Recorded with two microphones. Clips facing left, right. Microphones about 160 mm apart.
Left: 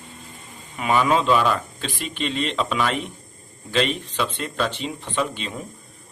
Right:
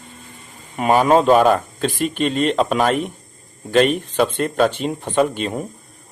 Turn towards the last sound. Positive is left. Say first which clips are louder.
# right 8 dB
turn(degrees=-50)  # may be behind; listen again after turning